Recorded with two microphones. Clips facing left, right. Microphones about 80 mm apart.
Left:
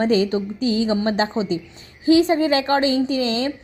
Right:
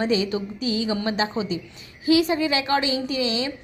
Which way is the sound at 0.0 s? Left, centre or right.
Left.